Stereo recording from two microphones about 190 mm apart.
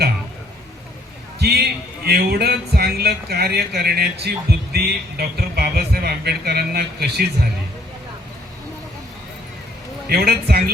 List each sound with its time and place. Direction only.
1.4 s a sound: 60° right (ahead or behind)
2.0 s speech: 55° right (ahead or behind)
10.1 s speech: 55° right (ahead or behind)